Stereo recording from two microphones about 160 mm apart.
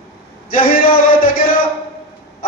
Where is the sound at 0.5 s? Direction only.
60° left (ahead or behind).